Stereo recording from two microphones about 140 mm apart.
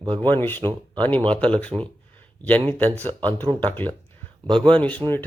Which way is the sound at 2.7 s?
10° left (ahead or behind).